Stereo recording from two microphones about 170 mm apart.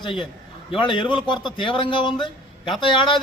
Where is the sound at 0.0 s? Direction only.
30° left (ahead or behind).